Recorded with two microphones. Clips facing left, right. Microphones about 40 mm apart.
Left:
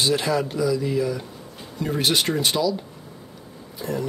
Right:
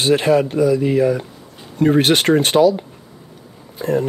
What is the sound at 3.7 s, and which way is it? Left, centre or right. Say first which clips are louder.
Speech: right 9 dB; right.